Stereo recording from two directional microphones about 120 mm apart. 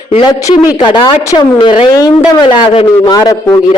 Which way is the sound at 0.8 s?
40° left (ahead or behind).